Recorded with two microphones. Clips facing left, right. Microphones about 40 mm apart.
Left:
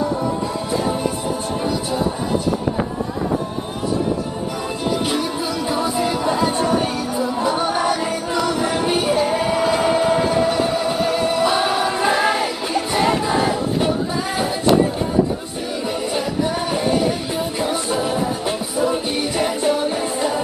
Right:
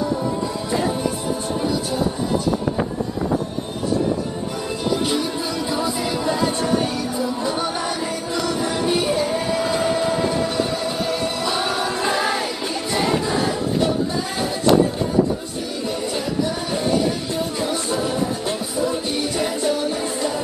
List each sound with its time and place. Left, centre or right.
0.0 s music: centre
5.1 s music: centre
15.9 s music: centre